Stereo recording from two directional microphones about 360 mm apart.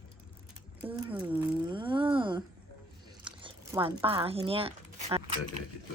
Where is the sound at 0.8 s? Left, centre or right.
Centre.